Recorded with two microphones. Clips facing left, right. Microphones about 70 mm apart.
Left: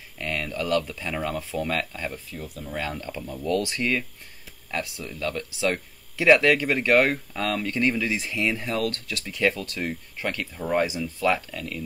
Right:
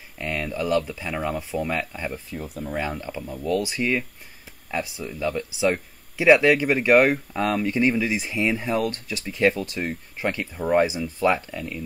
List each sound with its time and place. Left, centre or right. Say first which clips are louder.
0.2 s speech: right 2 dB; centre